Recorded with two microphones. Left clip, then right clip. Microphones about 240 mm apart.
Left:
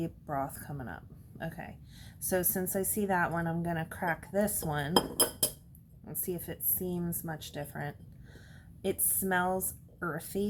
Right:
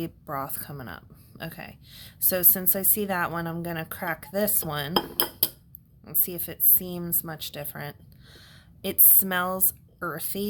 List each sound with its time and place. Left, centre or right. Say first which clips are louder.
0.0 s speech: right 3 dB; right
6.1 s a woman's voice: right 2 dB; right